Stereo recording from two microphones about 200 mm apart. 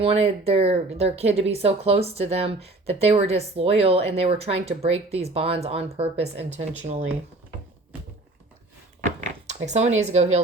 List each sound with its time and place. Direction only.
0.0 s speech: 30° right (ahead or behind)
9.2 s speech: 35° right (ahead or behind)